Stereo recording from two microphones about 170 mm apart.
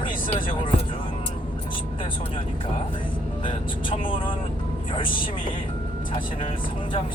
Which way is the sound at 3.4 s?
30° left (ahead or behind).